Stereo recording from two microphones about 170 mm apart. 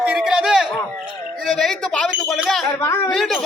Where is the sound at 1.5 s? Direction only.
Centre (ahead or behind).